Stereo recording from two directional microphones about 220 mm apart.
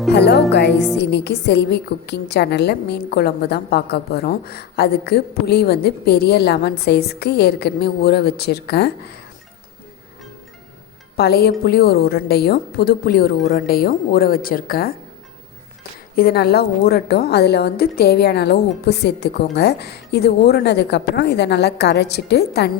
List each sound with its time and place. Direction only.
0.1 s a woman's voice: 50° left (ahead or behind)
11.2 s a woman's voice: 45° left (ahead or behind)
16.1 s a woman's voice: 45° left (ahead or behind)